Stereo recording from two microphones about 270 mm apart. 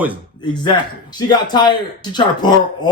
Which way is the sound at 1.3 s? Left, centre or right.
Centre.